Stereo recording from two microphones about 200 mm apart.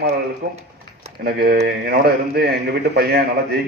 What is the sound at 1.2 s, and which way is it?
Speech, 50° right (ahead or behind).